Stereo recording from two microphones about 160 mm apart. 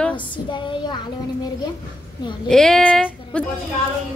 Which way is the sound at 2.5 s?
5° left (ahead or behind).